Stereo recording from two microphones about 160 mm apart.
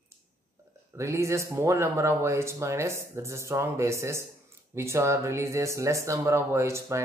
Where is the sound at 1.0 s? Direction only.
20° right (ahead or behind).